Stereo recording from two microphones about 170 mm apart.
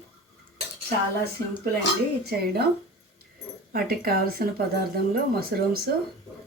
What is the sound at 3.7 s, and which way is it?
Speech, 65° right (ahead or behind).